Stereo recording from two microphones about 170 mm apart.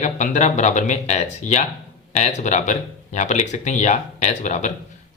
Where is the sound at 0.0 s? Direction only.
45° left (ahead or behind).